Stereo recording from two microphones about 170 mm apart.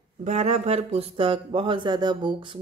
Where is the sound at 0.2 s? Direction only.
40° right (ahead or behind).